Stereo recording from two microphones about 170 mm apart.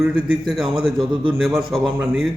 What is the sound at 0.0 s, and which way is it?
Speech, centre (ahead or behind).